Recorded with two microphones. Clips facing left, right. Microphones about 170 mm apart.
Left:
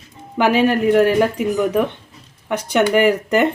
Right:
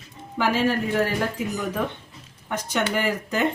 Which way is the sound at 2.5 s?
70° left (ahead or behind).